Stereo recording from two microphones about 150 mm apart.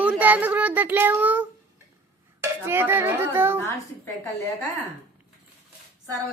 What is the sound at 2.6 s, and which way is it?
Speech, 15° right (ahead or behind).